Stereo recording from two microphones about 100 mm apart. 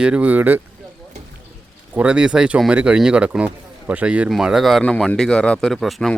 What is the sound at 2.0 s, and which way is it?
Speech, 10° right (ahead or behind).